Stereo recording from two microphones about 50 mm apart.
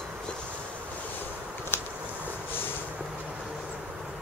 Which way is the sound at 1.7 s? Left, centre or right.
Left.